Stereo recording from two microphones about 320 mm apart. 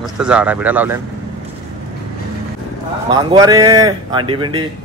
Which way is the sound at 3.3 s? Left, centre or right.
Centre.